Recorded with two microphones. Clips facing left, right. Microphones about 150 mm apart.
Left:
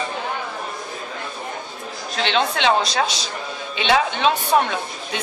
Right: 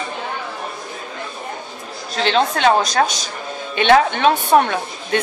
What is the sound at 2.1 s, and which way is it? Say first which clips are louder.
A woman's voice: right 4 dB; 40° right (ahead or behind).